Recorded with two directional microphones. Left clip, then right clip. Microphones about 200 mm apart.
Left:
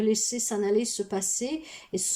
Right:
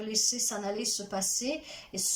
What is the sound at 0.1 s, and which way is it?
Speech, 45° left (ahead or behind).